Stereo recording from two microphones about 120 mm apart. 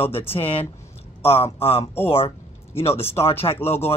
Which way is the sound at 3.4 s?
50° left (ahead or behind).